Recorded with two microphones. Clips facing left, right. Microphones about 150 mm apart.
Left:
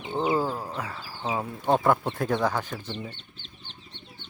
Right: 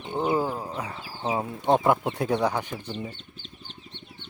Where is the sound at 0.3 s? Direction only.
15° right (ahead or behind).